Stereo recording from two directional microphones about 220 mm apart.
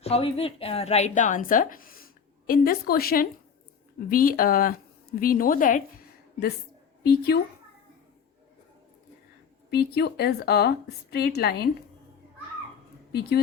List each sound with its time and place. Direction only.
0.0 s a woman's voice: 25° left (ahead or behind)
7.0 s a woman's voice: 45° left (ahead or behind)
9.6 s a woman's voice: 45° left (ahead or behind)